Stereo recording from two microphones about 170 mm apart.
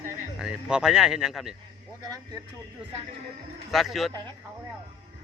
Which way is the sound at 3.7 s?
Centre (ahead or behind).